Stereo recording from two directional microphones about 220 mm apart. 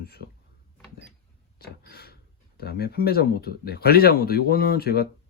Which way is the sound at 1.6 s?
45° left (ahead or behind).